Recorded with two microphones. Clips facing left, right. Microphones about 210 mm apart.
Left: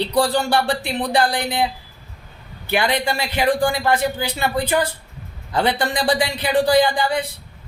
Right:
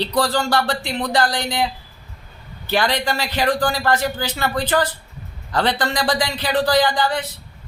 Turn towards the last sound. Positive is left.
turn(degrees=15)  # may be behind; listen again after turning